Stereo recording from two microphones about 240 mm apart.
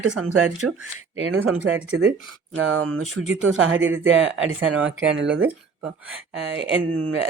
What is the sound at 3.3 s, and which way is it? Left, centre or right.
Speech, right.